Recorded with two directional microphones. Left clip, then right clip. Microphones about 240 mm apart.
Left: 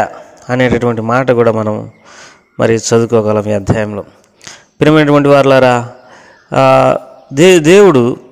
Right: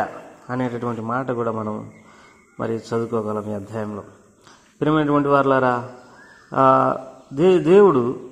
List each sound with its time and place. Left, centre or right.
0.0 s a man's voice: left